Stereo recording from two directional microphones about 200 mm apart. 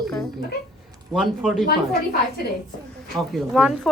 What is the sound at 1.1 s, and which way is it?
Speech, centre (ahead or behind).